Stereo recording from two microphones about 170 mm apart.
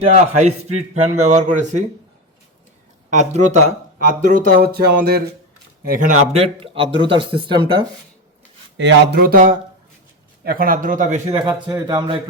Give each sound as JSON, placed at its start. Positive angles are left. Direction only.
{"t": 0.1, "sound": "a man's voice", "side_deg": -40}
{"t": 3.1, "sound": "a man's voice", "side_deg": -45}
{"t": 5.9, "sound": "a man's voice", "side_deg": -50}
{"t": 6.4, "sound": "speech", "side_deg": -30}
{"t": 8.8, "sound": "a man's voice", "side_deg": -80}
{"t": 11.4, "sound": "speech", "side_deg": -25}